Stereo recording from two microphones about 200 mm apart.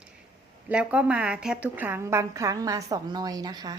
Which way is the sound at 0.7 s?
5° right (ahead or behind).